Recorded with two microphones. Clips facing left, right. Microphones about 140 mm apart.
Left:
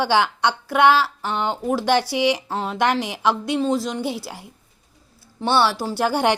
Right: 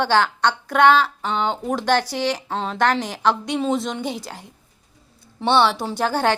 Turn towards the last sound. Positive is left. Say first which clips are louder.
# left 1 dB
turn(degrees=15)  # may be behind; listen again after turning